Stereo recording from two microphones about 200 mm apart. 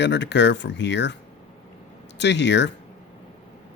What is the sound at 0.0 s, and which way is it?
Speech, 60° left (ahead or behind).